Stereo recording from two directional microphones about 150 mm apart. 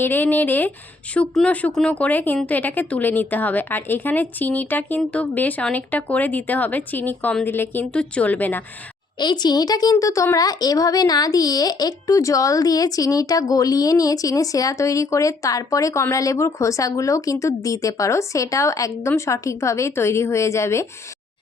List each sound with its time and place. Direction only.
0.0 s speech: 15° left (ahead or behind)
9.1 s speech: 30° left (ahead or behind)